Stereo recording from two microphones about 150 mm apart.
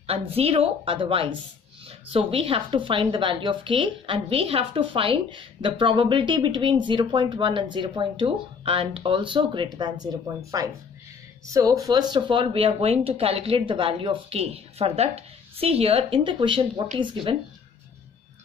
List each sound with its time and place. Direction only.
0.0 s speech: 40° right (ahead or behind)